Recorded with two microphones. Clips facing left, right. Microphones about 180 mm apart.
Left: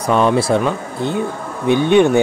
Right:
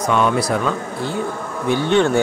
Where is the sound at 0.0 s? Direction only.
30° left (ahead or behind).